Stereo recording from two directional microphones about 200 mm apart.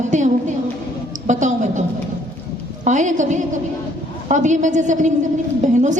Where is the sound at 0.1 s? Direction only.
35° right (ahead or behind).